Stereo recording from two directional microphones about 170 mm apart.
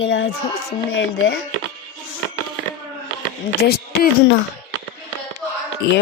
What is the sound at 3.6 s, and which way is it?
Speech, 65° left (ahead or behind).